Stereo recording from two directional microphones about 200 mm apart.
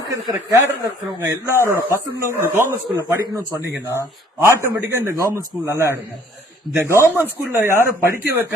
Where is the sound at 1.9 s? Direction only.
15° left (ahead or behind).